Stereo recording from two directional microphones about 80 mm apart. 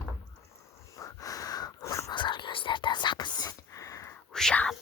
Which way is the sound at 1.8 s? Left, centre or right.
Left.